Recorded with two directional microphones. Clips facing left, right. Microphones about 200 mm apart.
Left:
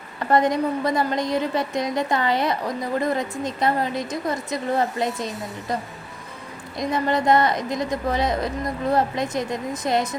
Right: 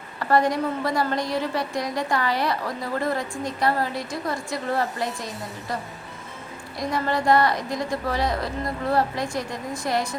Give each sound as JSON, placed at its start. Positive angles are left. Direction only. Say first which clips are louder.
{"t": 0.2, "sound": "a woman's voice", "louder": "left 2 dB", "side_deg": 20}
{"t": 6.7, "sound": "a woman's voice", "louder": "left 3 dB", "side_deg": 20}